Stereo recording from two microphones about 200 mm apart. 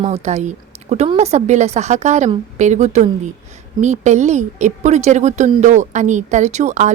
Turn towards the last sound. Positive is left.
turn(degrees=-35)  # may be behind; listen again after turning